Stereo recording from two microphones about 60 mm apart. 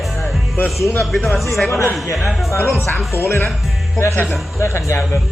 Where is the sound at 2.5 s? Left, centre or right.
Left.